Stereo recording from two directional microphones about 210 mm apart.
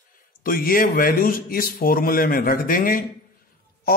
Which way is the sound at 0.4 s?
45° left (ahead or behind).